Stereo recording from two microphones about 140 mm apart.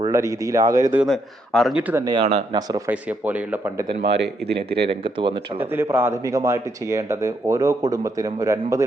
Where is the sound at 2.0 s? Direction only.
30° right (ahead or behind).